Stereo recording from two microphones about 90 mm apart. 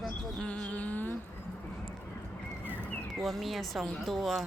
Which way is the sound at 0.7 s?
15° left (ahead or behind).